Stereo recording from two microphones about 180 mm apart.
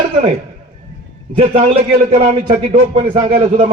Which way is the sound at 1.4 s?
30° right (ahead or behind).